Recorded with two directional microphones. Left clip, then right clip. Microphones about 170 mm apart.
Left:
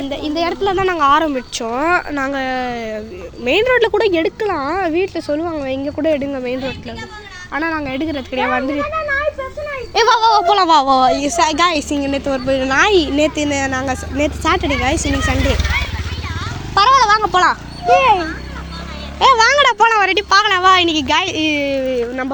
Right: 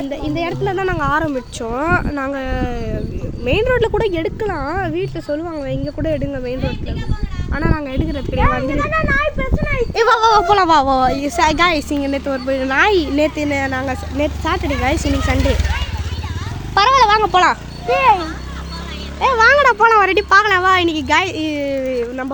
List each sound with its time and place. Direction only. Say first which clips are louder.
0.1 s speech: left 5 dB; 10° right (ahead or behind)
8.8 s speech: right 1 dB; 45° right (ahead or behind)
9.9 s a woman's voice: left 1 dB; 5° right (ahead or behind)
16.7 s a sound: left 1 dB; 20° right (ahead or behind)
17.8 s speech: left 2 dB; centre (ahead or behind)
19.2 s speech: left 1 dB; centre (ahead or behind)